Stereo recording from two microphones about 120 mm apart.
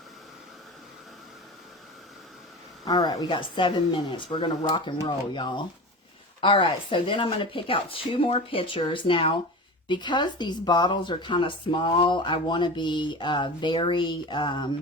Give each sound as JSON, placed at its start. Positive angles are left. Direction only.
{"t": 2.8, "sound": "speech", "side_deg": 35}